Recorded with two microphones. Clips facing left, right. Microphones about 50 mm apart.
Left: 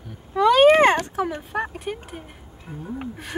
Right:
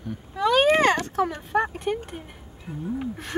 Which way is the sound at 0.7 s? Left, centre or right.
Left.